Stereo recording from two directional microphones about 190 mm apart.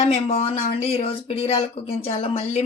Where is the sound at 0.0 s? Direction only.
35° left (ahead or behind).